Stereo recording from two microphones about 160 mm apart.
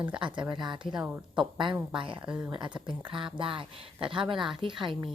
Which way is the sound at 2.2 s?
10° right (ahead or behind).